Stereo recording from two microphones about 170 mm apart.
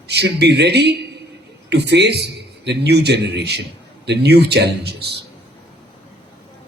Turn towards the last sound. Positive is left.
turn(degrees=-75)  # may be behind; listen again after turning